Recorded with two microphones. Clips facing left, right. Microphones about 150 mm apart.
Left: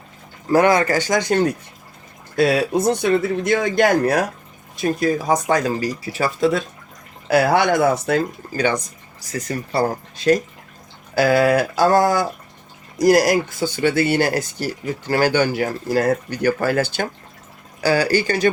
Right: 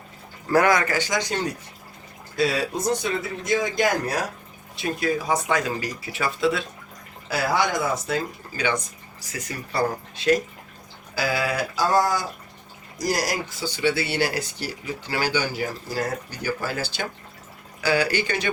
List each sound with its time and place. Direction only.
0.5 s speech: 25° left (ahead or behind)
0.9 s speech: 45° left (ahead or behind); by 4.2 s 60° left (ahead or behind)
4.8 s speech: 40° left (ahead or behind)
7.3 s speech: 60° left (ahead or behind)
9.3 s speech: 35° left (ahead or behind)
11.1 s speech: 50° left (ahead or behind)
17.7 s speech: 40° left (ahead or behind)